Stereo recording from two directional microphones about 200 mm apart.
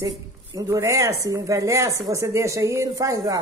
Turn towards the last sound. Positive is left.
turn(degrees=-15)  # may be behind; listen again after turning